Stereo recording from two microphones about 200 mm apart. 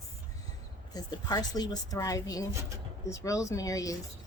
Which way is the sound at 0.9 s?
20° left (ahead or behind).